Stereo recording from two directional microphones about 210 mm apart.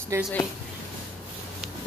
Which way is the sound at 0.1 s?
15° right (ahead or behind).